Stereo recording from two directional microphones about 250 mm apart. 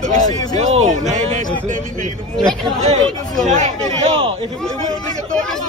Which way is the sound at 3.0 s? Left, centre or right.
Centre.